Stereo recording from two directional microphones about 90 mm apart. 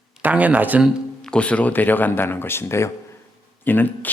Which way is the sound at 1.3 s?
15° left (ahead or behind).